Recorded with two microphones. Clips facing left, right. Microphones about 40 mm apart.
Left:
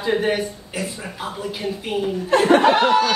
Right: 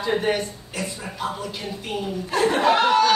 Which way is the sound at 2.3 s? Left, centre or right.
Left.